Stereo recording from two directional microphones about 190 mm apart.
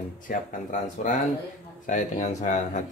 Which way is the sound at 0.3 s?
45° left (ahead or behind).